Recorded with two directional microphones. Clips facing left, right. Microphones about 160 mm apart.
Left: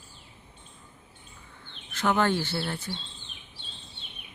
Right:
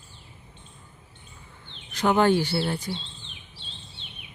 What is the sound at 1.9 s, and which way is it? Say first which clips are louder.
Speech: right 5 dB; 15° right (ahead or behind).